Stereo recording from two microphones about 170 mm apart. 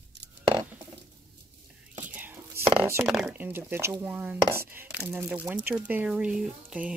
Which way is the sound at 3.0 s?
5° right (ahead or behind).